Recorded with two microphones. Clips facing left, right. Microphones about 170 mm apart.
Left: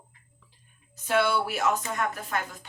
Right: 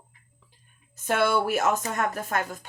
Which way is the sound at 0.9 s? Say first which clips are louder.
Right 1 dB; 50° right (ahead or behind).